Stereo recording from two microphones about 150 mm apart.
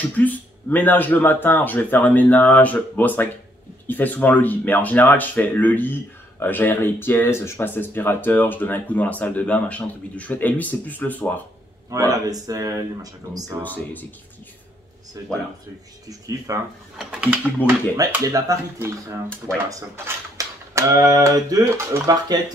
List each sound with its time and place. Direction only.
0.2 s speech: 10° left (ahead or behind)
11.9 s speech: 25° right (ahead or behind)
13.6 s speech: 10° left (ahead or behind)
15.2 s speech: 25° right (ahead or behind)
17.0 s speech: 10° right (ahead or behind)
18.2 s speech: 20° right (ahead or behind)